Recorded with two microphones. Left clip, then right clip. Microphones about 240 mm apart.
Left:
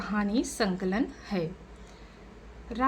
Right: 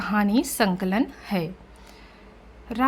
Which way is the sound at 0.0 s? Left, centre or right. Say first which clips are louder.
Right 7 dB; right.